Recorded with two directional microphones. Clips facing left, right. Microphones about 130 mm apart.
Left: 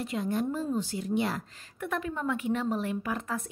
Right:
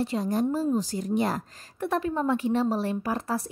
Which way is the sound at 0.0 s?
35° right (ahead or behind).